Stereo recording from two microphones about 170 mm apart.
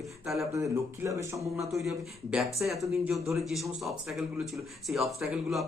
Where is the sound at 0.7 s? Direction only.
15° right (ahead or behind).